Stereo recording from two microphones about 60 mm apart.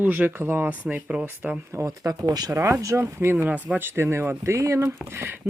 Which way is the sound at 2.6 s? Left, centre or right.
Right.